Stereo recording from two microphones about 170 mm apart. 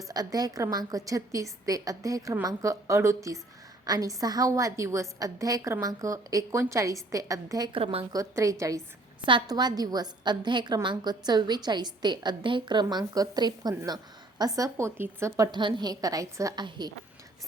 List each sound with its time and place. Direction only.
0.1 s a woman's voice: 20° right (ahead or behind)
8.1 s a woman's voice: 20° right (ahead or behind)
15.5 s a woman's voice: 25° right (ahead or behind)